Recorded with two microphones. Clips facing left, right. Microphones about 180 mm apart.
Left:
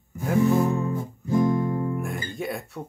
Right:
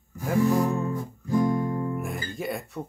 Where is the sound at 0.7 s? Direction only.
20° left (ahead or behind).